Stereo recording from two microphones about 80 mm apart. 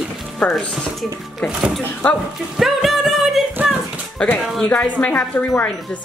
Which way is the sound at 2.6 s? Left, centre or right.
Centre.